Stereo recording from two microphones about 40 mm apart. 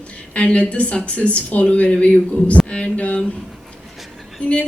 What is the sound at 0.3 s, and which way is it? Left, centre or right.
A woman's voice, left.